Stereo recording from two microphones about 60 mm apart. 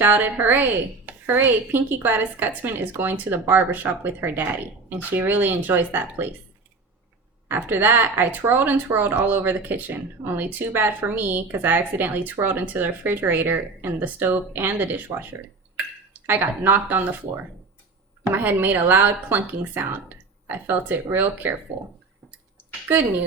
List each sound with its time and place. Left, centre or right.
0.0 s speech: right
7.4 s speech: right